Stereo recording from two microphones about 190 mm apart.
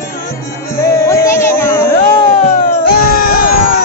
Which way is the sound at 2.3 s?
45° left (ahead or behind).